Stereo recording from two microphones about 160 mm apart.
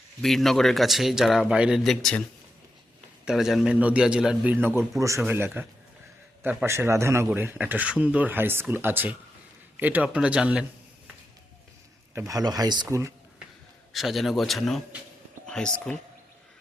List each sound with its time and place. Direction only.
0.2 s speech: centre (ahead or behind)
3.2 s a man's voice: 5° right (ahead or behind)
12.1 s speech: 20° right (ahead or behind)
13.9 s a man's voice: centre (ahead or behind)